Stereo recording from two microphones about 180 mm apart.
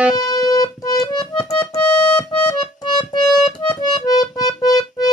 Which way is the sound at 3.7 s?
20° left (ahead or behind).